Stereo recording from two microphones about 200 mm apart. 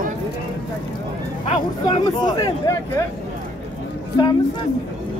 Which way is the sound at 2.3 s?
20° left (ahead or behind).